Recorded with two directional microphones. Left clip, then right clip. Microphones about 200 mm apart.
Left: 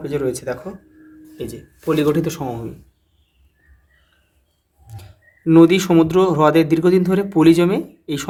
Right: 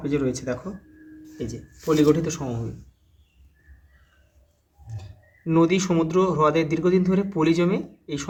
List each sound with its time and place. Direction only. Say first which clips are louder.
0.0 s speech: left 4 dB; 30° left (ahead or behind)
4.9 s speech: left 3 dB; 35° left (ahead or behind)